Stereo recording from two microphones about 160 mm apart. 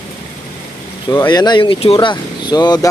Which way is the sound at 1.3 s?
25° left (ahead or behind).